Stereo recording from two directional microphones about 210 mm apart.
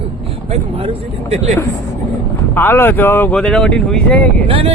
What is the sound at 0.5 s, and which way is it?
Speech, 30° right (ahead or behind).